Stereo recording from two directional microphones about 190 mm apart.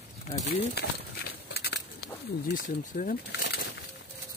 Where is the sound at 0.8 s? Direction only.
60° left (ahead or behind).